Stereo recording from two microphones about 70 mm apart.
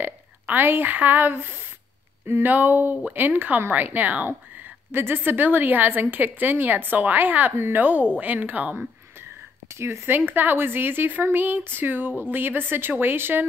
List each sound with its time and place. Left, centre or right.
0.0 s a woman's voice: right
9.8 s a woman's voice: right